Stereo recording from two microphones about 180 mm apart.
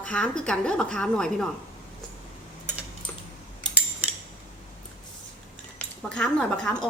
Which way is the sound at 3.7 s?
5° right (ahead or behind).